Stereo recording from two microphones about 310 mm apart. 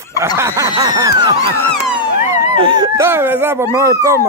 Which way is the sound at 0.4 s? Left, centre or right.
Centre.